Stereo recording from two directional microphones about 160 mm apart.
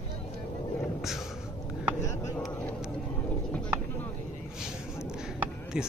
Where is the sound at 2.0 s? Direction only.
20° left (ahead or behind).